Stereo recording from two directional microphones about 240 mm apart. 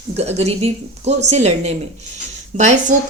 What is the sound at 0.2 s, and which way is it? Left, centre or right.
A woman's voice, right.